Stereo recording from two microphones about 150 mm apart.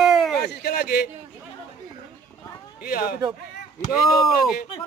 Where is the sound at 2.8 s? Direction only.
75° left (ahead or behind).